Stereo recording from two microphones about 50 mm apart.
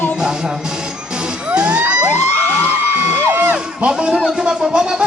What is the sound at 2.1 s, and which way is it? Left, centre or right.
Music, left.